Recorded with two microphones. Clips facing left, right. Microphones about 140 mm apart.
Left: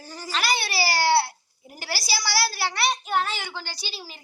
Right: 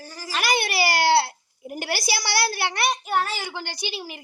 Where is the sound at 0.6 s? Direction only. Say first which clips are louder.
Right 2 dB; 55° right (ahead or behind).